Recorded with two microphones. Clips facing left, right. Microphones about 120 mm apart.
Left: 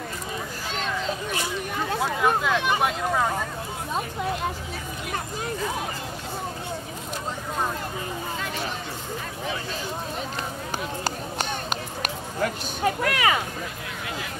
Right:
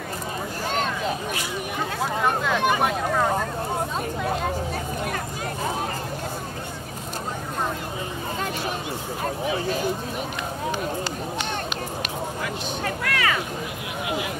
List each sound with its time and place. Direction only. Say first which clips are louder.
2.0 s a sound: left 1 dB; centre (ahead or behind)
2.8 s vehicle: right 1 dB; centre (ahead or behind)
12.8 s speech: left 4 dB; 20° left (ahead or behind)